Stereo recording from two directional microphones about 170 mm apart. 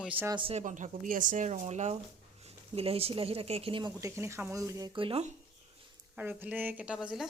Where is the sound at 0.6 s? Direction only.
50° right (ahead or behind); by 3.9 s 30° right (ahead or behind).